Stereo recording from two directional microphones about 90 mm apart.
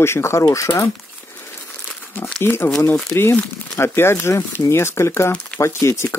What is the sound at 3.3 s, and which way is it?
Speech, 10° left (ahead or behind).